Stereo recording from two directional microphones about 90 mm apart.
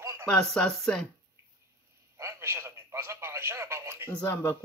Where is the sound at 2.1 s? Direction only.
30° right (ahead or behind).